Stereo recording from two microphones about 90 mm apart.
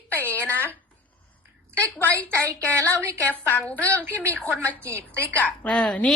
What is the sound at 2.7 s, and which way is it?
A woman's voice, 35° right (ahead or behind).